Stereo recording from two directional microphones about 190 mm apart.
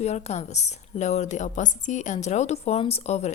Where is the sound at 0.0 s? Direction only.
35° left (ahead or behind).